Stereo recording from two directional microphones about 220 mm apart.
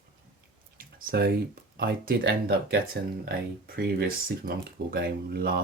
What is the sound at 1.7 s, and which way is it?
Speech, 40° right (ahead or behind).